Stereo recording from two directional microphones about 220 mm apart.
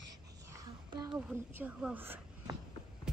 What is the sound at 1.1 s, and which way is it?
A woman's voice, 10° right (ahead or behind).